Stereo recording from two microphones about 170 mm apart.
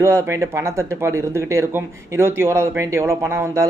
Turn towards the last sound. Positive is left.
turn(degrees=-15)  # may be behind; listen again after turning